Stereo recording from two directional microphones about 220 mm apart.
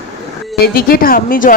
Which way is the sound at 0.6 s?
40° left (ahead or behind).